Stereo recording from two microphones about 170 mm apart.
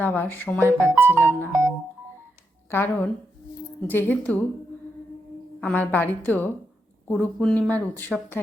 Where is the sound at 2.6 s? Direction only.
10° left (ahead or behind).